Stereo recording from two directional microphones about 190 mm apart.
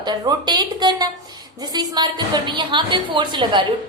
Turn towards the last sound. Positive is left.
turn(degrees=-25)  # may be behind; listen again after turning